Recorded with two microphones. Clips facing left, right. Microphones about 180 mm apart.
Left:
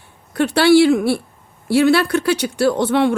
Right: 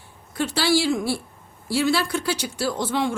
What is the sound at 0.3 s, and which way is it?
Speech, 60° left (ahead or behind).